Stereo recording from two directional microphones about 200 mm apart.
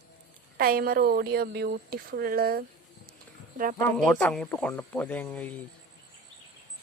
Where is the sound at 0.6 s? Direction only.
50° right (ahead or behind).